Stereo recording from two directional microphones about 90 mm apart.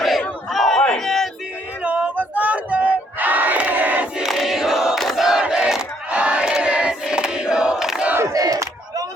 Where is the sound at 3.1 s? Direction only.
20° right (ahead or behind).